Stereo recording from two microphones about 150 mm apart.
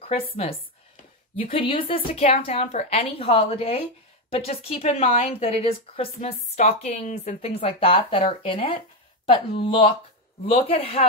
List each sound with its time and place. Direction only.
1.3 s a woman's voice: 40° left (ahead or behind)